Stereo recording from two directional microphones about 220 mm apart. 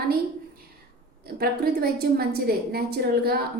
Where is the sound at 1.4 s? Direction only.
45° right (ahead or behind).